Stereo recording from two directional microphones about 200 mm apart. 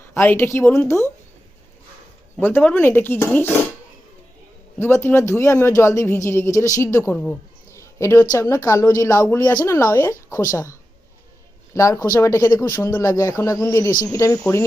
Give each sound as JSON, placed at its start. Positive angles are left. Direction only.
{"t": 0.1, "sound": "speech", "side_deg": 10}
{"t": 2.4, "sound": "speech", "side_deg": 10}
{"t": 4.8, "sound": "speech", "side_deg": 10}